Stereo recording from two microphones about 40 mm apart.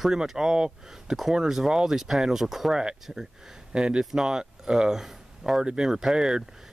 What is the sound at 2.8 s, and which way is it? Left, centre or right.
Speech, right.